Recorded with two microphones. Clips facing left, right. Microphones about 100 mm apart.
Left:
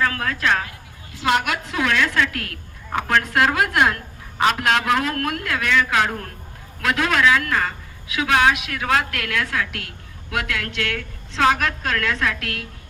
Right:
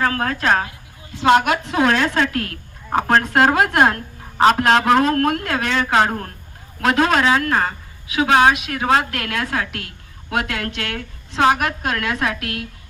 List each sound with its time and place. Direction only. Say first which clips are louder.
0.0 s a woman's voice: right 3 dB; 35° right (ahead or behind)
1.1 s a woman's voice: right 6 dB; 25° right (ahead or behind)